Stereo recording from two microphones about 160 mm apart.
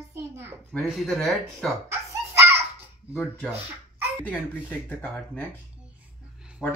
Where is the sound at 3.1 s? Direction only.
10° left (ahead or behind).